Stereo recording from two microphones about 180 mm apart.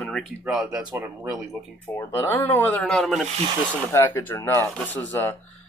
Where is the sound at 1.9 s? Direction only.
15° left (ahead or behind).